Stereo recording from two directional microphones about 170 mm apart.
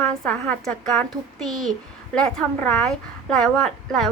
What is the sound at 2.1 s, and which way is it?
Speech, 5° left (ahead or behind).